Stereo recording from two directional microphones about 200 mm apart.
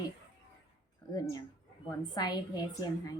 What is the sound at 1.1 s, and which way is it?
A woman's voice, 20° left (ahead or behind).